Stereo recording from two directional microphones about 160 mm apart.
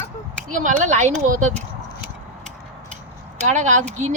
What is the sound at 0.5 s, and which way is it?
Speech, 50° right (ahead or behind).